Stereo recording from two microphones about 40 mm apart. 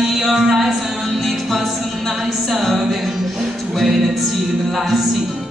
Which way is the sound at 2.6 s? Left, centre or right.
Centre.